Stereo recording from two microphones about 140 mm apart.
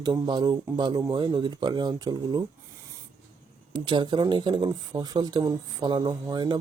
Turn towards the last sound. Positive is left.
turn(degrees=-30)  # may be behind; listen again after turning